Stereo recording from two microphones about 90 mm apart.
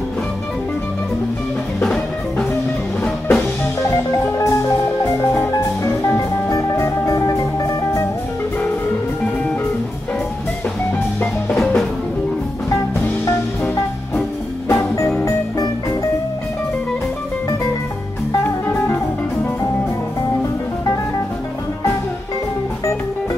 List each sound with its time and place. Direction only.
1.8 s music: 5° left (ahead or behind)
4.2 s music: 35° left (ahead or behind)
6.5 s music: 40° left (ahead or behind)
11.5 s music: 5° left (ahead or behind)
14.7 s music: 35° left (ahead or behind)
18.4 s music: 25° left (ahead or behind)